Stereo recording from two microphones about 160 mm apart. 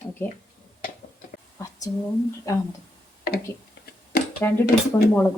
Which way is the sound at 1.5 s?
20° left (ahead or behind).